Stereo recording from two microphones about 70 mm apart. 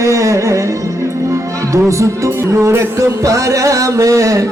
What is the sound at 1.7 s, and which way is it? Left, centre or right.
Music, right.